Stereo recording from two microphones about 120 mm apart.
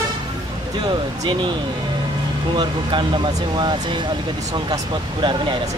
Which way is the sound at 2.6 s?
40° right (ahead or behind).